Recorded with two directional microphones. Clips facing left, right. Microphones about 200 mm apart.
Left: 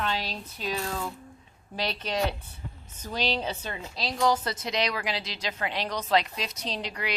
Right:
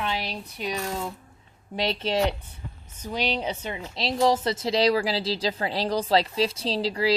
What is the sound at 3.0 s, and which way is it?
A woman's voice, 15° right (ahead or behind).